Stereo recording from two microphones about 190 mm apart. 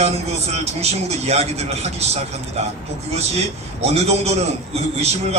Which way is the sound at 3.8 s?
35° right (ahead or behind).